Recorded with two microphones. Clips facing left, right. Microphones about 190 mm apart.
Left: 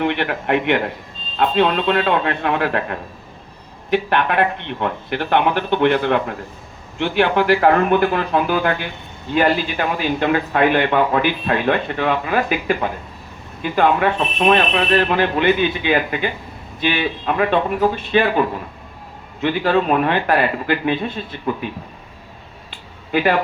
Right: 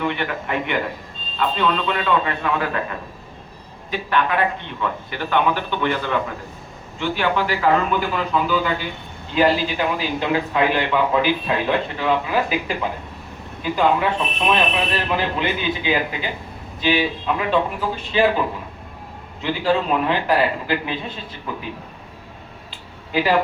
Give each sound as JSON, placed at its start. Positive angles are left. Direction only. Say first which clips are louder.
{"t": 0.0, "sound": "a man's voice", "louder": "left 4 dB", "side_deg": 65}
{"t": 23.1, "sound": "a man's voice", "louder": "left 3 dB", "side_deg": 55}